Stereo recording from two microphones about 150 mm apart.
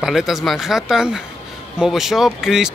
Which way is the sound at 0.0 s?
Centre (ahead or behind).